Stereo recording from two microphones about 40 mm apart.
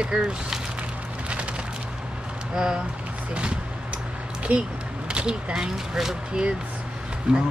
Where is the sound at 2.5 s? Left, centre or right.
Centre.